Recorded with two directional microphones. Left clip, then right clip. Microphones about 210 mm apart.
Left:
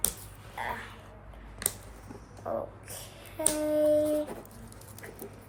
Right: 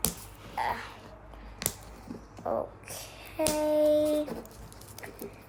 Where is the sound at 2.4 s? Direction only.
40° right (ahead or behind).